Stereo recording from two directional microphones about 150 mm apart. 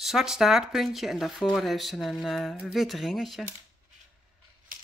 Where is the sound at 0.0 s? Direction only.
Centre (ahead or behind).